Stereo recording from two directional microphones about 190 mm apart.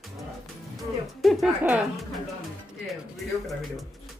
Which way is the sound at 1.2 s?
Centre (ahead or behind).